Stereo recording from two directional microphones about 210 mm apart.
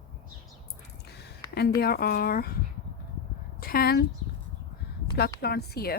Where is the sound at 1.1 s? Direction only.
50° left (ahead or behind).